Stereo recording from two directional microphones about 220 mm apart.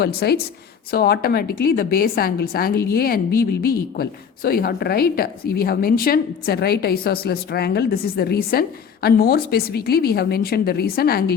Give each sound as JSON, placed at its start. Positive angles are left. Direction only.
{"t": 0.0, "sound": "a woman's voice", "side_deg": 45}